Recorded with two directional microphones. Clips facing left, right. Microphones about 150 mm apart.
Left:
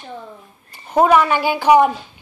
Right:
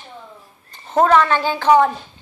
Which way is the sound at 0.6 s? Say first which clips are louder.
Left 1 dB; 10° left (ahead or behind).